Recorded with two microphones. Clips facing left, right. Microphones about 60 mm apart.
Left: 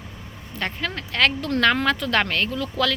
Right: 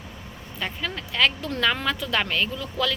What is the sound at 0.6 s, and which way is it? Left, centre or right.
Speech, left.